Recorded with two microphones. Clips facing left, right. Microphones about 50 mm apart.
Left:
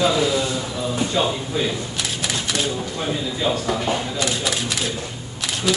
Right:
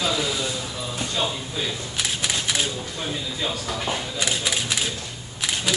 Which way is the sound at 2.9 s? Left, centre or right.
Left.